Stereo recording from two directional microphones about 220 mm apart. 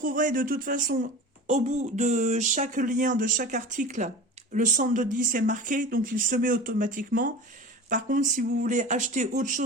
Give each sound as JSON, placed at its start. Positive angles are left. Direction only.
{"t": 0.0, "sound": "speech", "side_deg": -40}